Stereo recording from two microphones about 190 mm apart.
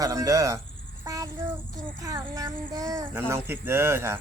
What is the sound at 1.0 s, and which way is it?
Child singing, 20° right (ahead or behind).